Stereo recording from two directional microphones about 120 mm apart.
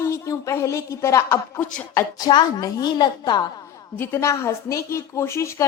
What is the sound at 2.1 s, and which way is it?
A woman's voice, 35° left (ahead or behind).